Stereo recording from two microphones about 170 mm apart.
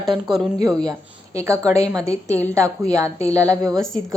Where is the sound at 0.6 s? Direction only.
25° right (ahead or behind).